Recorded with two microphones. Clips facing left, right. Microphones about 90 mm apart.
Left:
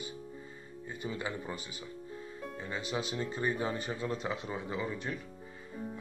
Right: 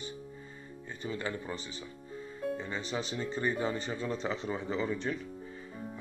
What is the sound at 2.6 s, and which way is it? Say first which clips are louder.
Speech: even; 5° left (ahead or behind).